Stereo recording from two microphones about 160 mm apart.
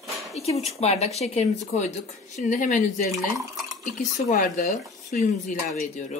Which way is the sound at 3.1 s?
20° right (ahead or behind).